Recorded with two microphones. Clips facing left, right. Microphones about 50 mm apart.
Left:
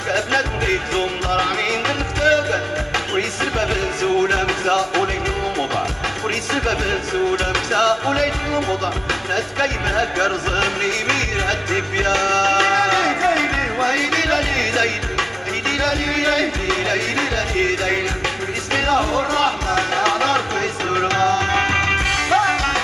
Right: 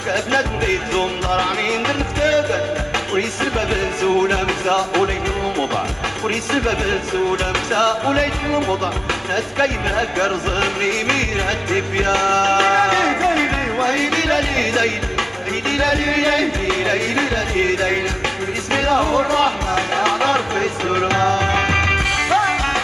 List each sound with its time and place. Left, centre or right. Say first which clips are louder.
0.1 s music: right 1 dB; centre
3.2 s music: right 1 dB; centre
6.2 s music: right 2 dB; centre
7.7 s music: right 1 dB; centre
21.5 s music: right 1 dB; centre